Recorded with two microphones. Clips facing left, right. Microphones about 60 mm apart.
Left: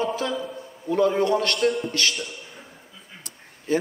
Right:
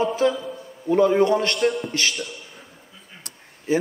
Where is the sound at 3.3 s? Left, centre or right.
Right.